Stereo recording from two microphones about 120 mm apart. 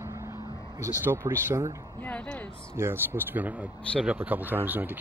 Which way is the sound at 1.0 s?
20° right (ahead or behind).